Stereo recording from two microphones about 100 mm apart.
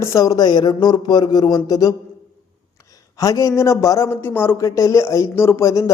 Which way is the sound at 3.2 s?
35° left (ahead or behind).